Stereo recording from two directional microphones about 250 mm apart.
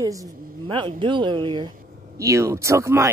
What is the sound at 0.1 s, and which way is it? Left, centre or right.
A woman's voice, centre.